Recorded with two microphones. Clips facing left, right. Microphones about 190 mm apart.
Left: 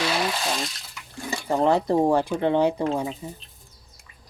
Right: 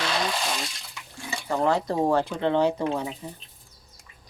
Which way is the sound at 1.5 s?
20° left (ahead or behind).